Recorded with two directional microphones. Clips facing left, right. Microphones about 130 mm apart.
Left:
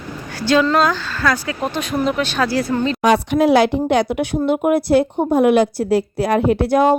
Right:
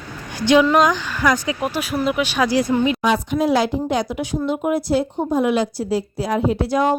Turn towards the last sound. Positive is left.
turn(degrees=55)  # may be behind; listen again after turning